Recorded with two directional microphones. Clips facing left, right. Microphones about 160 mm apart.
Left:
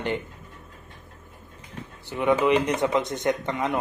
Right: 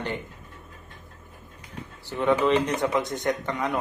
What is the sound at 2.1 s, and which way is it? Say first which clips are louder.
Speech: left 1 dB; 15° left (ahead or behind).